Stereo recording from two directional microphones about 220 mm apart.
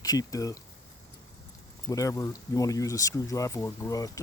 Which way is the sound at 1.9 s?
15° left (ahead or behind).